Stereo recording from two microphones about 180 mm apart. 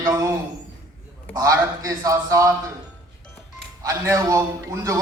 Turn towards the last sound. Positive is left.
turn(degrees=-20)  # may be behind; listen again after turning